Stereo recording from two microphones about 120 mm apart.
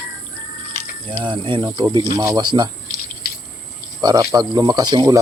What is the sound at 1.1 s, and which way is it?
Speech, 45° right (ahead or behind).